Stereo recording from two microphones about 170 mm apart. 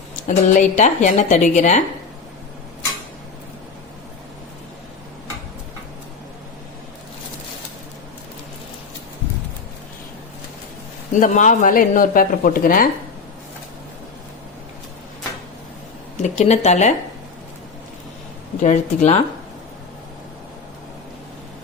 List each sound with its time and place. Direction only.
0.3 s speech: 45° left (ahead or behind)
11.1 s speech: 45° left (ahead or behind)
16.2 s speech: 40° left (ahead or behind)
18.6 s speech: 45° left (ahead or behind)